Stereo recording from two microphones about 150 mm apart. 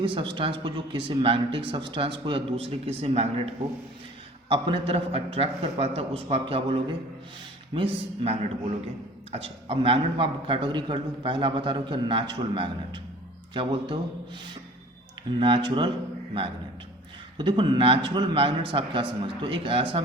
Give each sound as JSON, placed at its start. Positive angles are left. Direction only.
{"t": 0.0, "sound": "a man's voice", "side_deg": -35}
{"t": 4.4, "sound": "a man's voice", "side_deg": -35}
{"t": 15.4, "sound": "a man's voice", "side_deg": -35}
{"t": 17.3, "sound": "a man's voice", "side_deg": -30}